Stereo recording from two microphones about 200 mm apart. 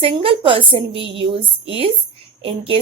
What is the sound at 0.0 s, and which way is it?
A woman's voice, 25° right (ahead or behind).